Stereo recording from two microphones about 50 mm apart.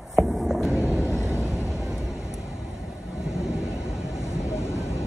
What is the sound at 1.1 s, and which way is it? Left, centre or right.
Vehicle, left.